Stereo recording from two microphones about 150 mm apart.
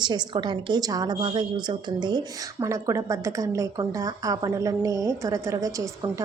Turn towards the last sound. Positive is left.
turn(degrees=-25)  # may be behind; listen again after turning